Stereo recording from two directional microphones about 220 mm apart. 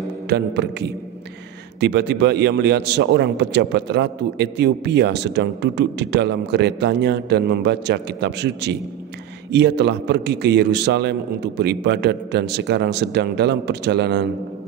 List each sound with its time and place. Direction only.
0.3 s a man's voice: 50° right (ahead or behind)